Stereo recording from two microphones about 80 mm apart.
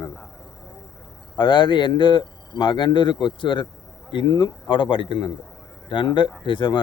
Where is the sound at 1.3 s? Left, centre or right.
Left.